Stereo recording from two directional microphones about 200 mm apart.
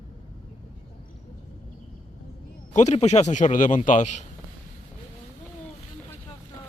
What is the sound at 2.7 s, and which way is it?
A man's voice, 35° left (ahead or behind).